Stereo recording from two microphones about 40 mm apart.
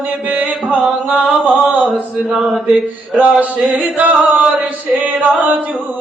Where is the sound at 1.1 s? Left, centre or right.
Centre.